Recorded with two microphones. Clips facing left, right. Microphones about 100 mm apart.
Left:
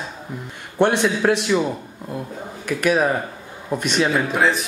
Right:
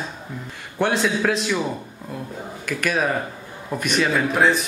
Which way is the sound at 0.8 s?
15° left (ahead or behind).